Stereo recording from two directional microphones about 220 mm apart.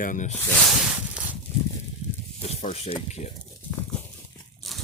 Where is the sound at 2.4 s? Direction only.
30° left (ahead or behind).